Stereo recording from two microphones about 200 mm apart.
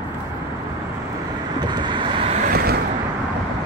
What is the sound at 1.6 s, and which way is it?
Vehicle, 20° right (ahead or behind).